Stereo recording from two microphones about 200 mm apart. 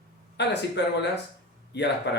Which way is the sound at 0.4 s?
60° left (ahead or behind).